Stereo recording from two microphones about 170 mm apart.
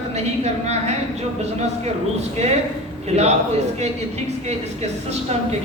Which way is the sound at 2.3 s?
40° right (ahead or behind).